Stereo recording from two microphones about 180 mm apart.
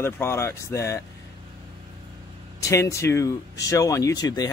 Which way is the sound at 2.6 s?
15° left (ahead or behind).